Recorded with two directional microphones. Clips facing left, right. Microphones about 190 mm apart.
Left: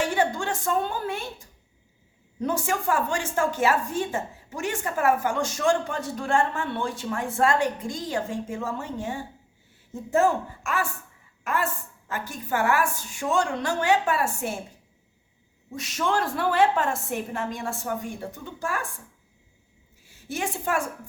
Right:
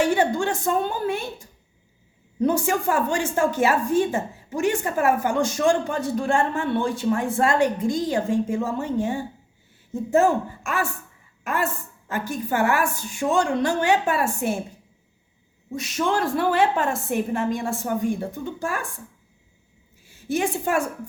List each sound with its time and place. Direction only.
0.0 s a woman's voice: 15° right (ahead or behind)
2.4 s a woman's voice: 15° right (ahead or behind)
15.7 s a woman's voice: 10° right (ahead or behind)
20.3 s a woman's voice: 15° right (ahead or behind)